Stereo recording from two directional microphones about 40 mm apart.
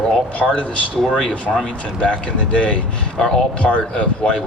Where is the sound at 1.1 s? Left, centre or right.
Centre.